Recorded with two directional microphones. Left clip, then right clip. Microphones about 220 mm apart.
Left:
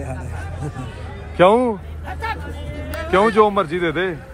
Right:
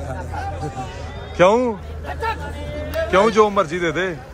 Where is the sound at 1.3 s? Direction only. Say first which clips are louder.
Left 1 dB; 5° right (ahead or behind).